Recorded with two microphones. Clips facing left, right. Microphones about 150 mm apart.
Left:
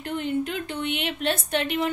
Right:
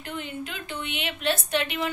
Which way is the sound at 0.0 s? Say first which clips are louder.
Left 8 dB; 55° left (ahead or behind).